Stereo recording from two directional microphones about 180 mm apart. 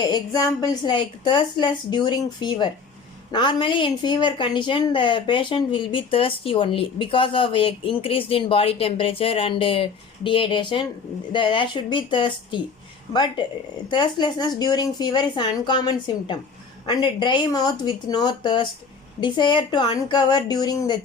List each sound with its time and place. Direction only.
0.0 s a woman's voice: 20° left (ahead or behind)
13.9 s a woman's voice: 25° left (ahead or behind)